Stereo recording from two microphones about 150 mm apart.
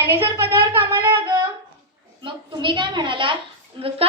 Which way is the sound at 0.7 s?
15° right (ahead or behind).